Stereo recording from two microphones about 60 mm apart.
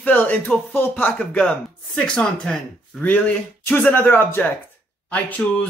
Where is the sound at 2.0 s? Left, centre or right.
Centre.